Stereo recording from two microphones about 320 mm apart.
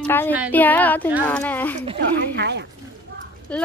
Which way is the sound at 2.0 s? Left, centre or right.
Right.